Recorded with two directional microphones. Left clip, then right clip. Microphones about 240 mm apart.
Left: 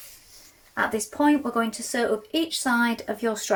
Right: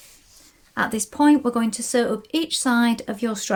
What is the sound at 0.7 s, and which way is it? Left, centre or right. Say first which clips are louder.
Speech: right 1 dB; right.